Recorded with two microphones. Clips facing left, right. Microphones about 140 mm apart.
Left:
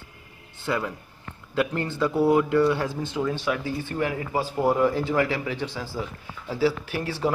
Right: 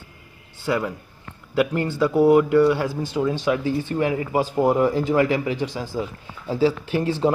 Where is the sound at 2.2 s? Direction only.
5° right (ahead or behind).